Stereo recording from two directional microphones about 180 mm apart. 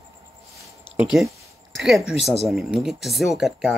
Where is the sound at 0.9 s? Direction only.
5° right (ahead or behind).